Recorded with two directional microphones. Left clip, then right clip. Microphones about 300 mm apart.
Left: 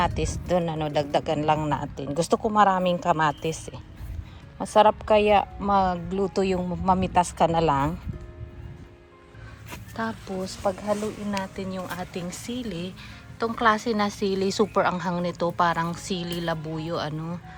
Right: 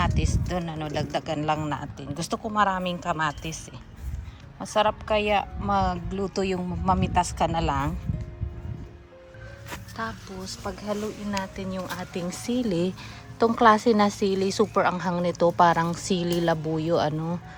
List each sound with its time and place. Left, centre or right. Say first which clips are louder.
0.0 s a woman's voice: left 3 dB; centre
9.6 s speech: left 2 dB; centre